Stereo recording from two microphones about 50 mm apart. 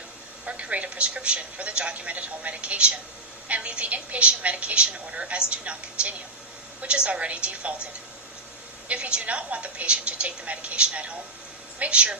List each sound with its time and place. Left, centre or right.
0.4 s a woman's voice: right
8.9 s a woman's voice: right